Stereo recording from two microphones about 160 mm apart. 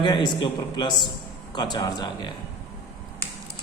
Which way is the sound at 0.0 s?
25° left (ahead or behind).